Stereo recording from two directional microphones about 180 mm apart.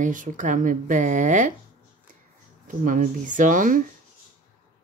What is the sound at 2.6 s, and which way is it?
Speech, 45° right (ahead or behind).